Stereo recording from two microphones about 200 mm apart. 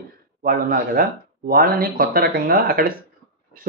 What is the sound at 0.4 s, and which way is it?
Speech, 45° right (ahead or behind).